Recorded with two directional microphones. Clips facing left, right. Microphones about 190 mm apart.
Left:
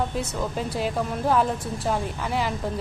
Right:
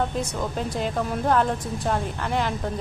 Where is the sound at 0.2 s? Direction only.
Centre (ahead or behind).